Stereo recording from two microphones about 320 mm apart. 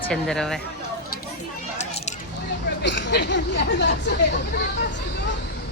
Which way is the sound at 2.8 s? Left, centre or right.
Left.